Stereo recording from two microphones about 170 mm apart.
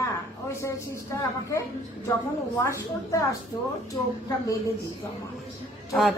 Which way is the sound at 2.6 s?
20° left (ahead or behind).